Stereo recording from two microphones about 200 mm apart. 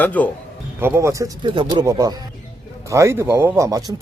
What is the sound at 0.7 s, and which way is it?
Speech, 10° right (ahead or behind).